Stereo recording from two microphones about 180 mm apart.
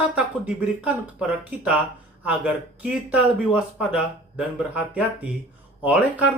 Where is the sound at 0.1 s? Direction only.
5° right (ahead or behind).